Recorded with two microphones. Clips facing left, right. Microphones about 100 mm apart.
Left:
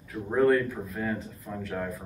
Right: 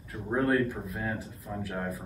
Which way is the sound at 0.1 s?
5° right (ahead or behind).